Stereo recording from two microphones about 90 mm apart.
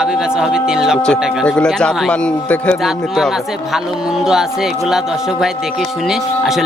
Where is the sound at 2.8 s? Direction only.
Centre (ahead or behind).